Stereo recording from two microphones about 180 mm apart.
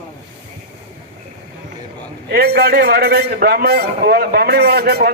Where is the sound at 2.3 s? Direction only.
60° right (ahead or behind).